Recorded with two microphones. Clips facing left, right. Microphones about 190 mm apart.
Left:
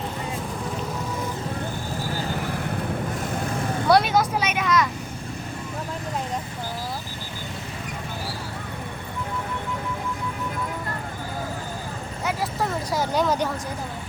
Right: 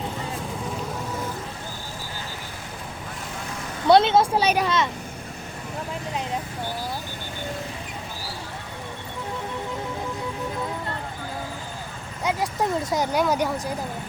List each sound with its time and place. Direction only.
2.4 s vehicle: 60° left (ahead or behind)
3.8 s speech: 25° right (ahead or behind)
12.9 s speech: 15° right (ahead or behind)